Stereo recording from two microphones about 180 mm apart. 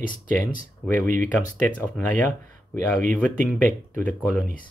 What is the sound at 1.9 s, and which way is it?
Speech, 45° right (ahead or behind).